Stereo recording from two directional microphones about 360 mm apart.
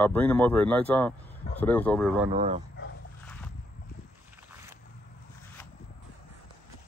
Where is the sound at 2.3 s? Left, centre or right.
Centre.